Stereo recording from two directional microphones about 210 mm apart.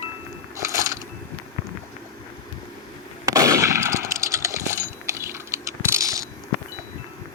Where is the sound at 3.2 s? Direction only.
15° right (ahead or behind).